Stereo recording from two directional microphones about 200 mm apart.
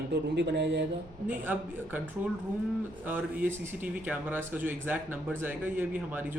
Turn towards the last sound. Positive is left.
turn(degrees=-10)  # may be behind; listen again after turning